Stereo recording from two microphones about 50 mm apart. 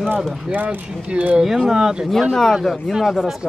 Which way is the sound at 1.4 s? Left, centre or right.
Centre.